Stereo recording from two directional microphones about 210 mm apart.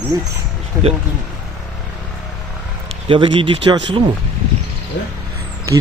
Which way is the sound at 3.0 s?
25° right (ahead or behind).